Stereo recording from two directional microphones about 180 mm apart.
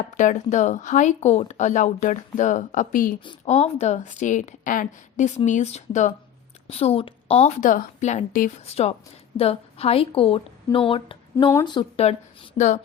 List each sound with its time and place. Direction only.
0.2 s a woman's voice: 45° left (ahead or behind)